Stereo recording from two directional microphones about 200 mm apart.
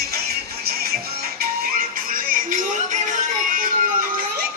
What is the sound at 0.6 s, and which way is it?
Music, 50° right (ahead or behind).